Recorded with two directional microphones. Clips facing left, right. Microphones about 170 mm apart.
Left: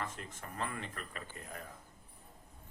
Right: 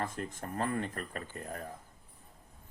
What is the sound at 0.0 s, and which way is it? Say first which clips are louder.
Speech: right 6 dB; 40° right (ahead or behind).